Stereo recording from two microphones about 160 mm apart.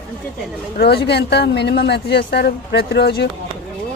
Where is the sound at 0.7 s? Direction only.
90° left.